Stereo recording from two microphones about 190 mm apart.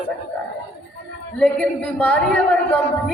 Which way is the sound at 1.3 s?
5° left (ahead or behind).